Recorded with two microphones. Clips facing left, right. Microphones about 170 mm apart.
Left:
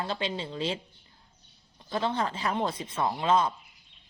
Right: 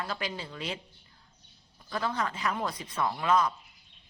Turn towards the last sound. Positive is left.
turn(degrees=25)  # may be behind; listen again after turning